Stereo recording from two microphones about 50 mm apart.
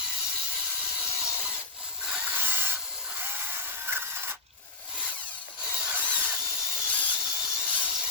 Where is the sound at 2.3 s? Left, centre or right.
Right.